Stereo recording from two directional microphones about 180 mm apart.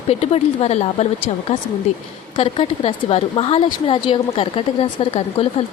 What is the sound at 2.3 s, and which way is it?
A woman's voice, 30° left (ahead or behind).